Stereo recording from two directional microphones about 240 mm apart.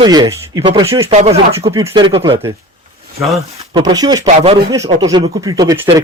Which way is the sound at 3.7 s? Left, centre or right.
Centre.